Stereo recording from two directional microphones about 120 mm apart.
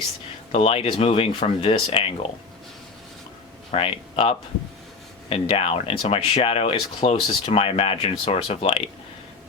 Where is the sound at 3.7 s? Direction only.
55° left (ahead or behind).